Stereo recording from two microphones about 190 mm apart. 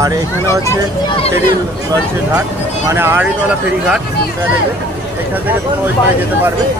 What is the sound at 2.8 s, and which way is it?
Speech, 10° right (ahead or behind).